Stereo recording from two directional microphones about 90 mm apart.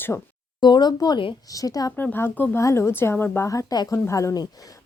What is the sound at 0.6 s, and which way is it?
Speech, 55° left (ahead or behind).